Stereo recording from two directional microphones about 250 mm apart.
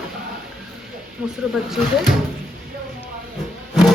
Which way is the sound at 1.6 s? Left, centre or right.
Centre.